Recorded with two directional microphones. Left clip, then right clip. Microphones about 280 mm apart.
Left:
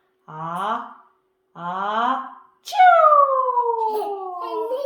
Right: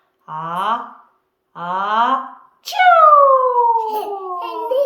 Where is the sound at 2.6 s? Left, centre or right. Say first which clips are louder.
Right 3 dB; centre.